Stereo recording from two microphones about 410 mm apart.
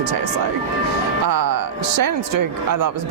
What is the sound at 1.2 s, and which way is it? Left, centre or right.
Speech, right.